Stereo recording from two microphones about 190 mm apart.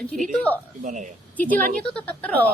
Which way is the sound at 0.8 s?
40° right (ahead or behind).